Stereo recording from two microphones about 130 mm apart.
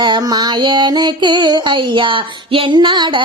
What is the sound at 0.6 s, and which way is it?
Music, 35° right (ahead or behind).